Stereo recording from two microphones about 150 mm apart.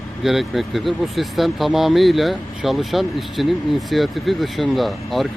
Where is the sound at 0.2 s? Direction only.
Centre (ahead or behind).